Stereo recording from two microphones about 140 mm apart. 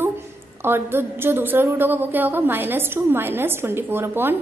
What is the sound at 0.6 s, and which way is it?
A woman's voice, 15° right (ahead or behind).